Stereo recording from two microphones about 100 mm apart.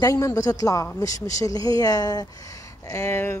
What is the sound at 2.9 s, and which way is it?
Speech, 25° left (ahead or behind).